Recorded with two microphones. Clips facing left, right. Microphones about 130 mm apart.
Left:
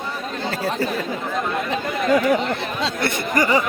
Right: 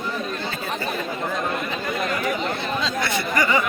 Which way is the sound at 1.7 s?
75° left (ahead or behind).